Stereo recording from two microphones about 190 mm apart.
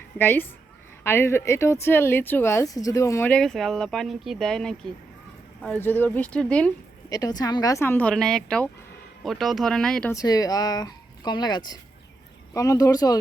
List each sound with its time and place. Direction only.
0.2 s speech: 10° left (ahead or behind)
7.1 s speech: 20° left (ahead or behind); by 10.1 s 5° left (ahead or behind)
10.1 s speech: 20° left (ahead or behind)